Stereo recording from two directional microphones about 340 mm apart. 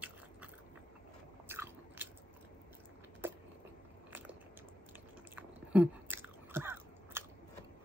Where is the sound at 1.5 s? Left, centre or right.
Centre.